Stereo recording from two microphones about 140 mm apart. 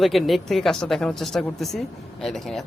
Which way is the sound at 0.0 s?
Centre (ahead or behind).